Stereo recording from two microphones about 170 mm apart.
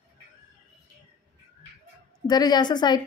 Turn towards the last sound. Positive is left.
turn(degrees=25)  # may be behind; listen again after turning